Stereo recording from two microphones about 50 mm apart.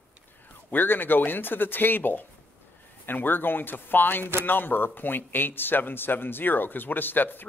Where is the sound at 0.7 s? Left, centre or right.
Left.